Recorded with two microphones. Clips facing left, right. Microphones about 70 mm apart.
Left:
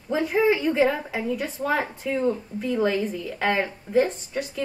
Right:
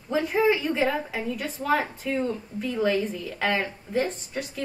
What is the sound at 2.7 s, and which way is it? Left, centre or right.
A woman's voice, centre.